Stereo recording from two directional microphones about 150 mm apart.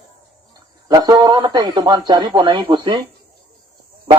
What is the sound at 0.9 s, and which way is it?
Speech, 25° right (ahead or behind).